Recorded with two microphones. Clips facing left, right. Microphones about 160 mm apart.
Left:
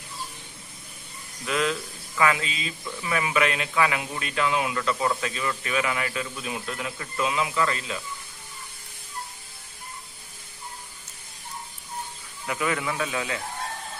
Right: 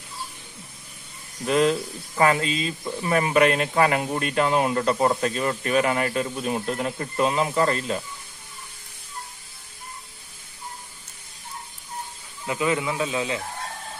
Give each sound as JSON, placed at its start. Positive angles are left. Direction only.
{"t": 1.4, "sound": "speech", "side_deg": -40}
{"t": 12.4, "sound": "speech", "side_deg": -20}